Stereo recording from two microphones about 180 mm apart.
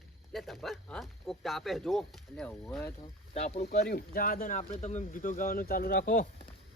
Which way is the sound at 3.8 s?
55° left (ahead or behind).